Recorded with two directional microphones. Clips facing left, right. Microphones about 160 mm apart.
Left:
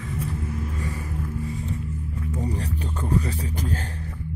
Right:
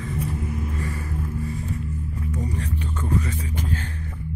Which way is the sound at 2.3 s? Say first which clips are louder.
Left 1 dB; 30° left (ahead or behind).